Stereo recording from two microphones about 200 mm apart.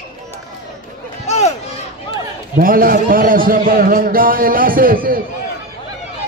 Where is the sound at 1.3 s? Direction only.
35° left (ahead or behind).